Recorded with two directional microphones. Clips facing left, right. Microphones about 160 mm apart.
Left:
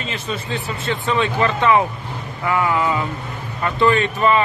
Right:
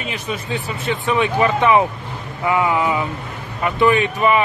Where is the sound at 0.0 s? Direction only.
15° right (ahead or behind).